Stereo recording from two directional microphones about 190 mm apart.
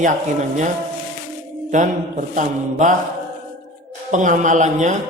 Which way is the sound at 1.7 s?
40° right (ahead or behind).